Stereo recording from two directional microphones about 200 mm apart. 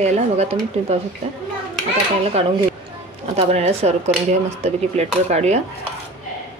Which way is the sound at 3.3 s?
30° right (ahead or behind).